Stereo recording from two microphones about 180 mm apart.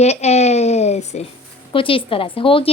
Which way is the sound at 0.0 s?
40° left (ahead or behind).